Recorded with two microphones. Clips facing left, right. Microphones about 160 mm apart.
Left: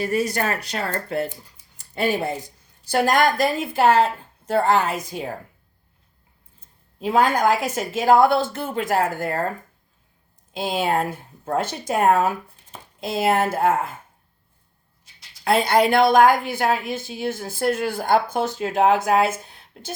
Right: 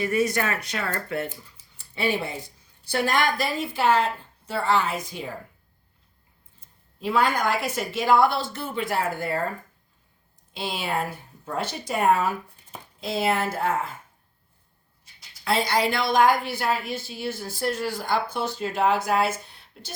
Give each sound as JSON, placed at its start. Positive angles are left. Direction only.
{"t": 0.0, "sound": "a woman's voice", "side_deg": 35}
{"t": 7.1, "sound": "a woman's voice", "side_deg": 45}
{"t": 10.5, "sound": "a woman's voice", "side_deg": 45}
{"t": 15.4, "sound": "a woman's voice", "side_deg": 55}